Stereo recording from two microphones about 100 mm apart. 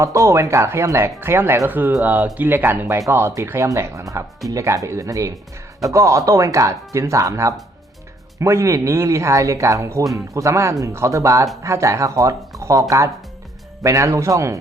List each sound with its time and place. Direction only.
0.0 s speech: 30° right (ahead or behind)
13.8 s speech: 30° right (ahead or behind)